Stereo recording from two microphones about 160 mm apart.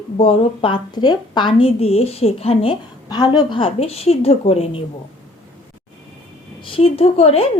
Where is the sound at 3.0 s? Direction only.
25° left (ahead or behind).